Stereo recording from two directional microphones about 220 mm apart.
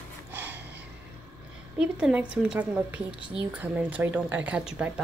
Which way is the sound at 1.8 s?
5° right (ahead or behind).